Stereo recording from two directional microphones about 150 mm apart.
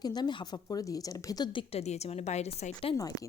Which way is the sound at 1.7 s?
45° left (ahead or behind).